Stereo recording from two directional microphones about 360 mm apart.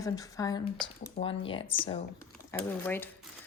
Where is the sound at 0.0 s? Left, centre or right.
Centre.